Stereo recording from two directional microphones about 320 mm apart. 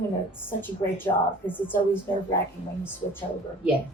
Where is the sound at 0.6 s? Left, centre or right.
Centre.